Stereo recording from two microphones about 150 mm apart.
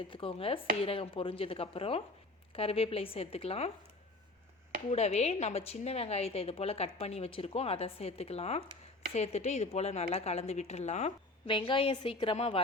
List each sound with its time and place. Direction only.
0.1 s chopping: 35° left (ahead or behind)
4.9 s a woman's voice: 45° left (ahead or behind)
11.4 s chopping: 35° left (ahead or behind)